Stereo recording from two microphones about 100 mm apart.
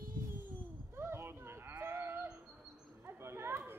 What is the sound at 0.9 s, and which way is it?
Sheep, 25° right (ahead or behind).